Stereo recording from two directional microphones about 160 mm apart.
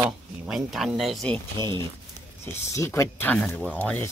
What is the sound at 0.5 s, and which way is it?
Speech, centre (ahead or behind).